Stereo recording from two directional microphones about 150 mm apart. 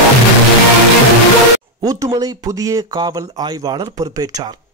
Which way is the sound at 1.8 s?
25° right (ahead or behind).